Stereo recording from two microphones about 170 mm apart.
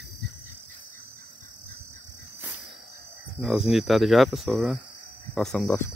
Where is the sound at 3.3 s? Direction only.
5° right (ahead or behind).